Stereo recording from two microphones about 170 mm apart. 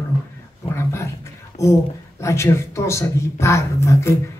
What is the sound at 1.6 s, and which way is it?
Speech, 15° left (ahead or behind).